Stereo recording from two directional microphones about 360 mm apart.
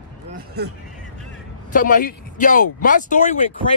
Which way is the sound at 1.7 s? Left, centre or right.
Left.